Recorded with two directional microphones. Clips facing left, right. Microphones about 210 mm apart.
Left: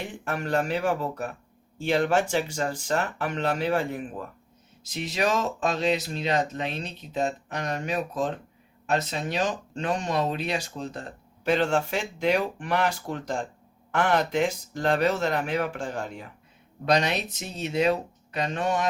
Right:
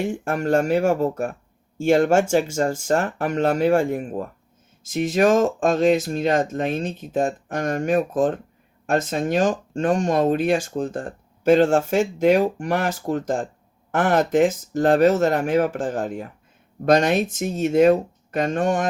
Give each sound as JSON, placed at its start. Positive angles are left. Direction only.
{"t": 0.0, "sound": "speech", "side_deg": -45}